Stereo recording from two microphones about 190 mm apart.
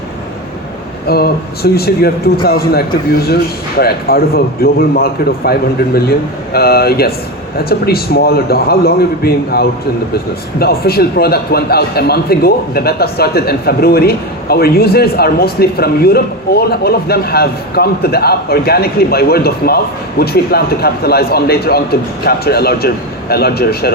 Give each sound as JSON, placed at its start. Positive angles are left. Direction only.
{"t": 1.0, "sound": "a man's voice", "side_deg": 55}